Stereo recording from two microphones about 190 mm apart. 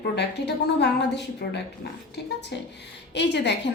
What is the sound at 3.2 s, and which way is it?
Speech, 65° left (ahead or behind).